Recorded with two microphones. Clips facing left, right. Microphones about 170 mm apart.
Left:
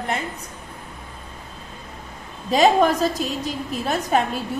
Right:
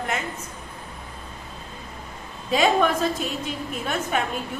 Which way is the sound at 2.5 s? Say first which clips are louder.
Left 4 dB; 40° left (ahead or behind).